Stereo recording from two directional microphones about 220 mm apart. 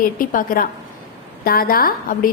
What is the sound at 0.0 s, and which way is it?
A woman's voice, 40° left (ahead or behind).